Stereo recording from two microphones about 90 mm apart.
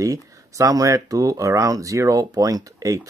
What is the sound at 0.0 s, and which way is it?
Speech, 40° right (ahead or behind).